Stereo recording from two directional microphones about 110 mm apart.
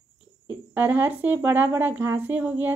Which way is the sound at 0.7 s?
15° right (ahead or behind).